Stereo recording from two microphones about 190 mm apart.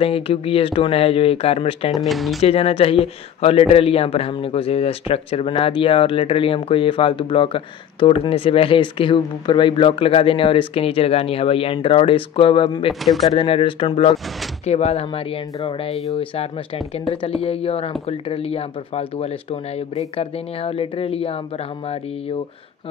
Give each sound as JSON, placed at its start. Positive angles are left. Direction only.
{"t": 0.0, "sound": "speech", "side_deg": 30}
{"t": 2.0, "sound": "speech", "side_deg": 0}
{"t": 2.4, "sound": "speech", "side_deg": 30}